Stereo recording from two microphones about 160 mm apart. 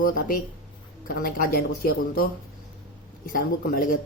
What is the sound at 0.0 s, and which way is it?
Speech, 60° left (ahead or behind).